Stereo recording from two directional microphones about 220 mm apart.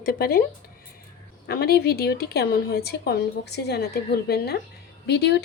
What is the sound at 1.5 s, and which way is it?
Speech, 45° left (ahead or behind).